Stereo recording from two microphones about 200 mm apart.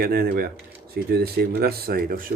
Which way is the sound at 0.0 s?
50° right (ahead or behind).